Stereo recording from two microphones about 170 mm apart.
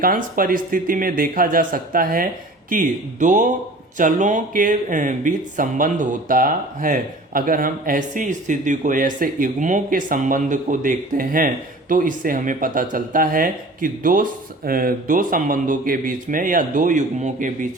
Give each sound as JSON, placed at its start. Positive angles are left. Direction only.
{"t": 0.0, "sound": "speech", "side_deg": -55}